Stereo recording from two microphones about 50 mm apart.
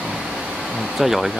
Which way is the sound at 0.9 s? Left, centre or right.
Centre.